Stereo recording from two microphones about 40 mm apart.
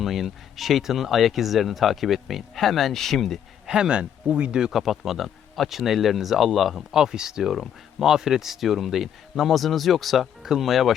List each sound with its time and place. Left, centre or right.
0.0 s speech: centre
3.7 s speech: right
4.7 s speech: centre
6.9 s speech: centre